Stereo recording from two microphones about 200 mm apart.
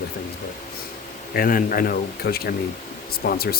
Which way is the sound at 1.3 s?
45° left (ahead or behind).